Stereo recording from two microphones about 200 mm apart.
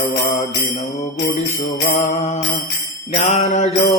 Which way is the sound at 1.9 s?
35° left (ahead or behind).